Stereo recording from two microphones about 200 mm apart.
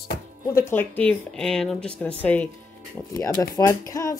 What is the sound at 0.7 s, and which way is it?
Speech, 10° left (ahead or behind).